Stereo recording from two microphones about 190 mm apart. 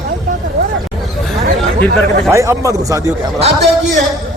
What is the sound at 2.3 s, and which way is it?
Speech, 15° right (ahead or behind).